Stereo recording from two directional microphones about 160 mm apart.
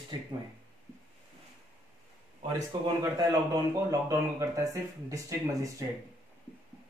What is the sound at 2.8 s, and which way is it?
Speech, 25° right (ahead or behind).